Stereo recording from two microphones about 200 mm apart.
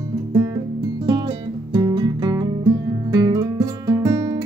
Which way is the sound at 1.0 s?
20° right (ahead or behind).